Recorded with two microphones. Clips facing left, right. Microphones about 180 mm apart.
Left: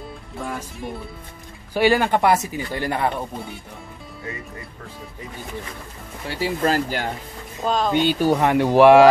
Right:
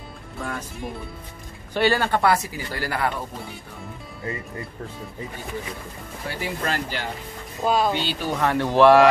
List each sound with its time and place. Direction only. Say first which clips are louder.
0.4 s music: left 1 dB; centre (ahead or behind)
1.7 s speech: left 3 dB; 10° left (ahead or behind)
6.2 s speech: left 6 dB; 35° left (ahead or behind)
7.6 s speech: right 1 dB; 5° right (ahead or behind)
7.9 s speech: left 8 dB; 50° left (ahead or behind)
8.4 s speech: left 1 dB; 15° left (ahead or behind)